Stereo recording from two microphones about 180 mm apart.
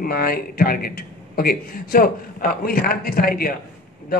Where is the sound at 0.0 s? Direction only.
55° left (ahead or behind).